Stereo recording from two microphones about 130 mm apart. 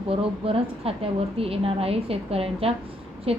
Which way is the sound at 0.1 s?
45° right (ahead or behind).